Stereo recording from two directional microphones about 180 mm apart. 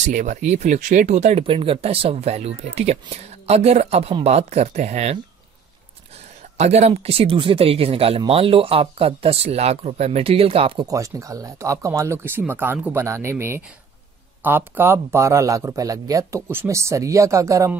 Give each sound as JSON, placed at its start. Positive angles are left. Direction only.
{"t": 0.0, "sound": "speech", "side_deg": -45}
{"t": 6.6, "sound": "speech", "side_deg": -35}
{"t": 10.9, "sound": "a man's voice", "side_deg": -15}